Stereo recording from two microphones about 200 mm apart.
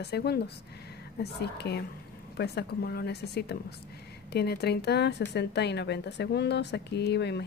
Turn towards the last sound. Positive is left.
turn(degrees=55)  # may be behind; listen again after turning